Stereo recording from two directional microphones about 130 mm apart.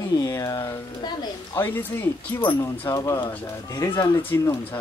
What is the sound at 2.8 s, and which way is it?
A woman's voice, 25° left (ahead or behind).